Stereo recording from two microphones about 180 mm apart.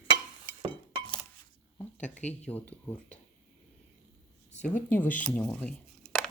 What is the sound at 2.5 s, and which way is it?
Speech, 10° left (ahead or behind).